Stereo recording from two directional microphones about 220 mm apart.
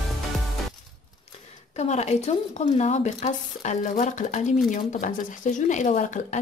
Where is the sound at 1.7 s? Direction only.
30° left (ahead or behind).